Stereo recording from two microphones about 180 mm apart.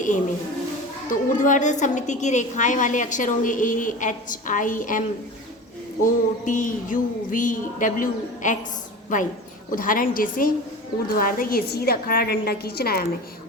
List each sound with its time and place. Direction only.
1.1 s a woman's voice: 45° left (ahead or behind)